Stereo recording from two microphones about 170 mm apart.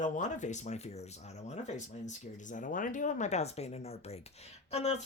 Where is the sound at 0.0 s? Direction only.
45° left (ahead or behind).